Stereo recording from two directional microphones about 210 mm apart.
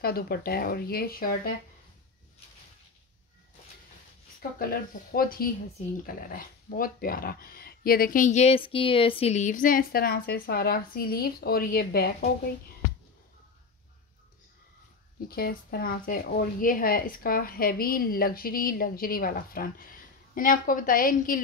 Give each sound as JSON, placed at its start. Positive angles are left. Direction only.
{"t": 0.0, "sound": "speech", "side_deg": 45}
{"t": 5.1, "sound": "speech", "side_deg": 45}
{"t": 15.2, "sound": "a woman's voice", "side_deg": 45}